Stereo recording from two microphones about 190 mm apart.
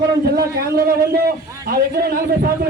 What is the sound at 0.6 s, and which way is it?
A man's voice, 55° right (ahead or behind).